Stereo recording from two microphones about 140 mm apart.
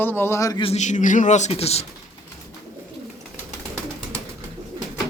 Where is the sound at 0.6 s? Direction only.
50° left (ahead or behind).